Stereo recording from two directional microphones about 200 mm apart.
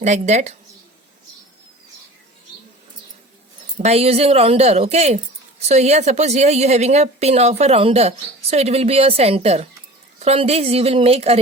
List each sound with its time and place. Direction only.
0.0 s speech: 35° right (ahead or behind)
3.8 s a woman's voice: 30° right (ahead or behind)